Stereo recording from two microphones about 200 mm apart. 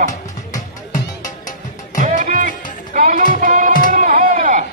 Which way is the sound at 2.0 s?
40° right (ahead or behind).